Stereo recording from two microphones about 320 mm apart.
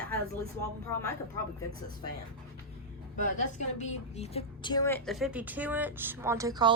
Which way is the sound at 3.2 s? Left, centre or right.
Left.